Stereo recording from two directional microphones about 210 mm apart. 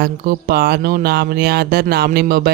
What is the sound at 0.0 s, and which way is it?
Speech, 45° right (ahead or behind).